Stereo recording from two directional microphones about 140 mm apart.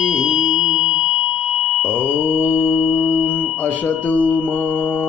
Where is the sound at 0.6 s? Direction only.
5° right (ahead or behind).